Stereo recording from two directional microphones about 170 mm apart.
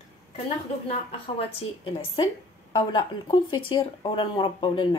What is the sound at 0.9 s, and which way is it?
Speech, 35° left (ahead or behind).